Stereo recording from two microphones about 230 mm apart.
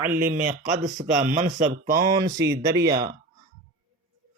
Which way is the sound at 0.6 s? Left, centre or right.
Right.